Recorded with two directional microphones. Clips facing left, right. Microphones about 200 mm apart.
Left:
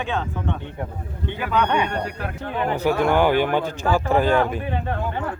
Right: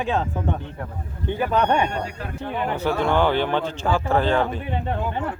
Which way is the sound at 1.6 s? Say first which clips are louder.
Even; 30° right (ahead or behind).